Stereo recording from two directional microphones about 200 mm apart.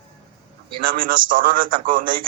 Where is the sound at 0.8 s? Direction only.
45° right (ahead or behind).